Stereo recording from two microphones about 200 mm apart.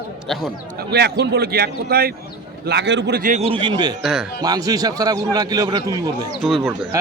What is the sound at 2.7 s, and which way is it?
A man's voice, 60° right (ahead or behind).